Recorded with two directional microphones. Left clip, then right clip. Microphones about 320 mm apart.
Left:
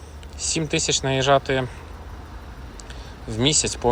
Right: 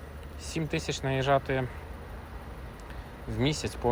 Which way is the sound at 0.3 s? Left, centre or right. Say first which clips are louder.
Left 10 dB; centre.